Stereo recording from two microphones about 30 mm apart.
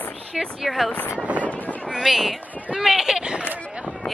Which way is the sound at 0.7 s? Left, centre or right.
Left.